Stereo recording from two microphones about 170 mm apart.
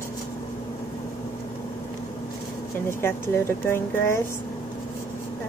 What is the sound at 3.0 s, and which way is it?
Speech, 15° left (ahead or behind).